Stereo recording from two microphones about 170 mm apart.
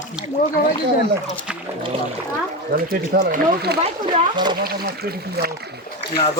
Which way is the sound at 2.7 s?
55° right (ahead or behind).